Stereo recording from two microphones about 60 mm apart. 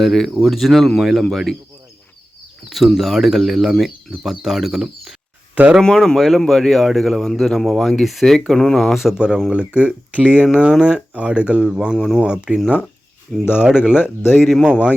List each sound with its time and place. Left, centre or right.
0.0 s speech: centre
2.6 s speech: centre
11.9 s speech: centre
12.2 s speech: centre
13.9 s speech: left
14.7 s speech: centre